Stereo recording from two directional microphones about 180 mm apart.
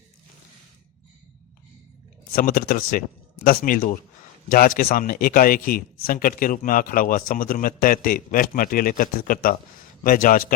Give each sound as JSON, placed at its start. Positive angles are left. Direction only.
{"t": 2.3, "sound": "speech", "side_deg": 50}